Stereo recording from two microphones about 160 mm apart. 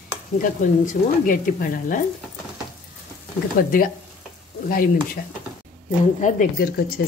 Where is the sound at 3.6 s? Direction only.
65° left (ahead or behind).